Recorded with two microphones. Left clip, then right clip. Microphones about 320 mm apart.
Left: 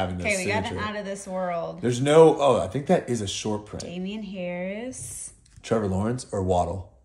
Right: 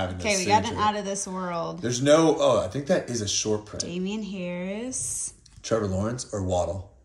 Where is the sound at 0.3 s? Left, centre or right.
Centre.